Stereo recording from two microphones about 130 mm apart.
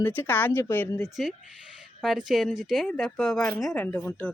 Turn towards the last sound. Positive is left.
turn(degrees=15)  # may be behind; listen again after turning